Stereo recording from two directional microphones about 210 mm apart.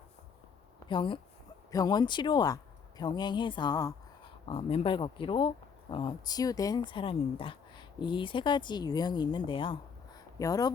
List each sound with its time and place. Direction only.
0.9 s speech: 25° left (ahead or behind)